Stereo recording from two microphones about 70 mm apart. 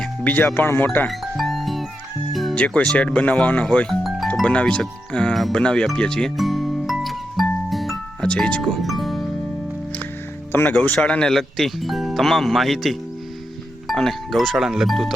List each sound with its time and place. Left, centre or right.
0.3 s speech: left
1.0 s music: centre
2.6 s speech: centre
6.3 s music: centre
8.3 s speech: centre
8.6 s music: centre
10.5 s speech: left
11.0 s speech: centre